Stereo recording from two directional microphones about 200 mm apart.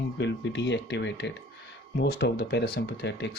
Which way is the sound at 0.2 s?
60° left (ahead or behind).